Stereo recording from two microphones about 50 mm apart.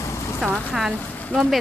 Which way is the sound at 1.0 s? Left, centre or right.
Left.